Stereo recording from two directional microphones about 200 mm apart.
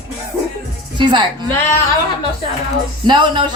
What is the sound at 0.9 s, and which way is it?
Speech, 25° right (ahead or behind).